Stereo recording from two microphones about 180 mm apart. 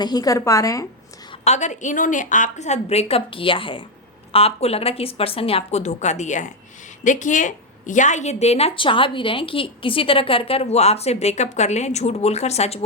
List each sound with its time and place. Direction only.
0.0 s a woman's voice: 20° left (ahead or behind)
1.3 s a woman's voice: 40° left (ahead or behind)